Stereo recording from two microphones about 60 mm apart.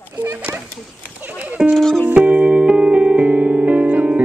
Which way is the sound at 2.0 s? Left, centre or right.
Right.